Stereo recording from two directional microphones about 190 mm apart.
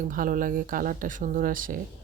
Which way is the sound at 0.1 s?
45° right (ahead or behind).